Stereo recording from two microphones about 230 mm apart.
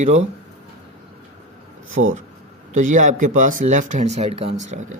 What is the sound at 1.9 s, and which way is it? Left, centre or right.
Speech, right.